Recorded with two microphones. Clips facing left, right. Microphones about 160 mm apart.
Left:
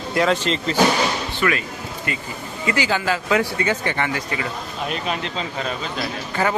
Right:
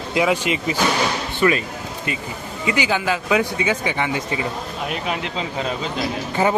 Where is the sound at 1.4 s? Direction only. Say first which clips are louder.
Right 4 dB; 25° right (ahead or behind).